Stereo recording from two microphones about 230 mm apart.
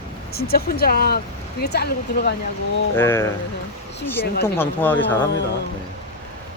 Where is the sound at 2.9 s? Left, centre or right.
Centre.